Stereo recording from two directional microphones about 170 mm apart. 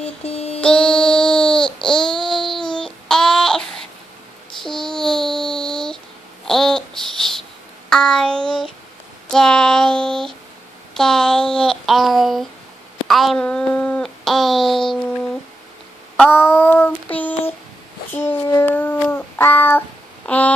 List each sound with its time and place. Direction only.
0.0 s music: 35° left (ahead or behind)
0.6 s babbling: 5° left (ahead or behind)
4.6 s child singing: 5° left (ahead or behind)
6.4 s babbling: centre (ahead or behind)
7.9 s child singing: 5° left (ahead or behind)
9.3 s female singing: 5° left (ahead or behind)
11.0 s a sound: 5° left (ahead or behind)
16.2 s child singing: 10° left (ahead or behind)
20.2 s a sound: 10° left (ahead or behind)